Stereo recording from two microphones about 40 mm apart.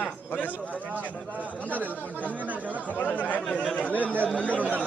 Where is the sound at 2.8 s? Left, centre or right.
Left.